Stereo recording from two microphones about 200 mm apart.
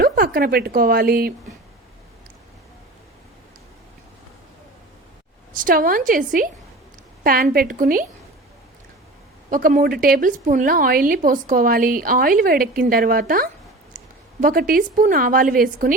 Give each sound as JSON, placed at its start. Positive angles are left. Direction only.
{"t": 0.0, "sound": "speech", "side_deg": -45}
{"t": 5.5, "sound": "a woman's voice", "side_deg": -45}
{"t": 9.5, "sound": "a woman's voice", "side_deg": -45}